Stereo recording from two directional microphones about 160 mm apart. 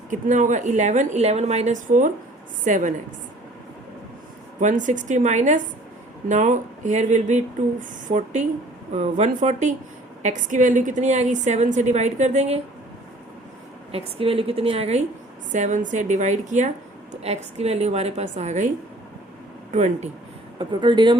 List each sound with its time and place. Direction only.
0.1 s a woman's voice: 50° right (ahead or behind)
4.6 s a woman's voice: 55° right (ahead or behind)
13.9 s a woman's voice: 35° right (ahead or behind)
19.7 s a woman's voice: 45° right (ahead or behind)
20.6 s speech: 30° right (ahead or behind)